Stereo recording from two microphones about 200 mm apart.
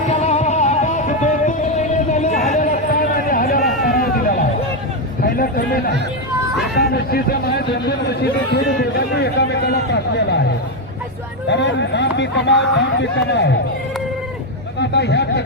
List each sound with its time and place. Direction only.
0.1 s music: 35° left (ahead or behind)
5.2 s a sound: 45° left (ahead or behind)
6.7 s a man's voice: 50° left (ahead or behind)
11.4 s a man's voice: 60° left (ahead or behind)
14.8 s speech: 60° left (ahead or behind)